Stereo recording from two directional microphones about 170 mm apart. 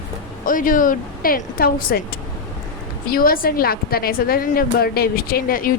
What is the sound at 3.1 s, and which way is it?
A woman's voice, 60° left (ahead or behind).